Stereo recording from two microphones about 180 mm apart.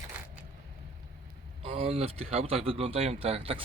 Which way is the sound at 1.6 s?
35° right (ahead or behind).